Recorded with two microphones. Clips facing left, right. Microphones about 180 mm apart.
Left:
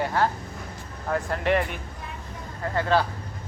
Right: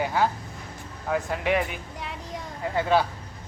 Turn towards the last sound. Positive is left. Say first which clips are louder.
# even
turn(degrees=-10)  # may be behind; listen again after turning